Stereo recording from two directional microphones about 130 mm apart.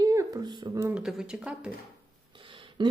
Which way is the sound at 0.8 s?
15° right (ahead or behind).